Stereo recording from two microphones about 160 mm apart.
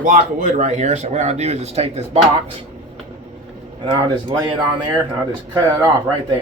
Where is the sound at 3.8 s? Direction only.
30° right (ahead or behind).